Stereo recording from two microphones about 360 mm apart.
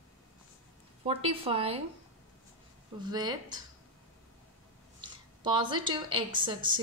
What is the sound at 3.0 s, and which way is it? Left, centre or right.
Speech, centre.